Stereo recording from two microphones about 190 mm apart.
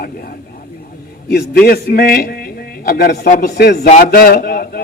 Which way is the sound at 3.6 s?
55° left (ahead or behind).